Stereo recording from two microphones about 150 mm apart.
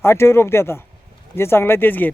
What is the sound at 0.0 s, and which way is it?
Speech, 15° left (ahead or behind).